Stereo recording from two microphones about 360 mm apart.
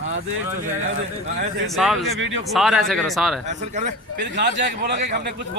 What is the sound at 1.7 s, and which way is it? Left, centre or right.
Speech, centre.